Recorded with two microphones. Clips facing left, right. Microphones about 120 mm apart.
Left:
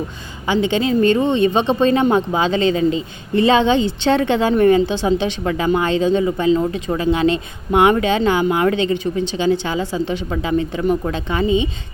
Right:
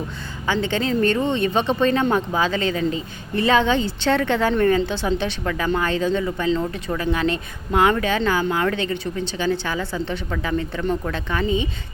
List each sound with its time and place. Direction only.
0.4 s speech: 15° left (ahead or behind)